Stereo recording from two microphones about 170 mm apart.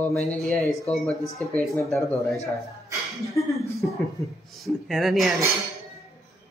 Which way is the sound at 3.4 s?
15° left (ahead or behind).